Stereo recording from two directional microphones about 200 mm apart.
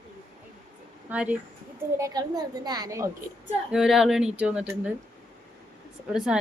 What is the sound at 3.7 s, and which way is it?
A woman's voice, 5° right (ahead or behind).